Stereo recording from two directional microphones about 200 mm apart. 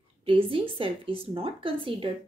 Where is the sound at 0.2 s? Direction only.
25° right (ahead or behind).